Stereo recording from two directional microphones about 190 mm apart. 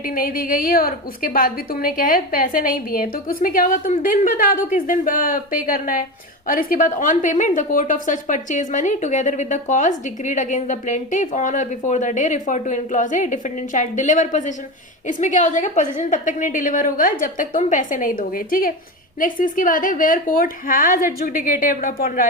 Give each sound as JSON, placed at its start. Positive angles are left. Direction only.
{"t": 0.0, "sound": "a woman's voice", "side_deg": 50}